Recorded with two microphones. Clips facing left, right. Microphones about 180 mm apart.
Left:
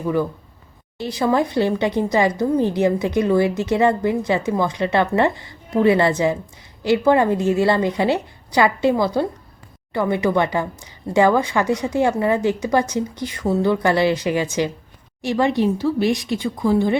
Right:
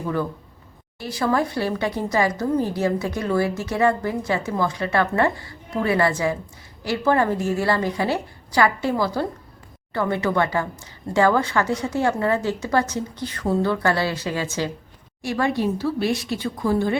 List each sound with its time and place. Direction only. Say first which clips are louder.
0.9 s a woman's voice: left 3 dB; 20° left (ahead or behind)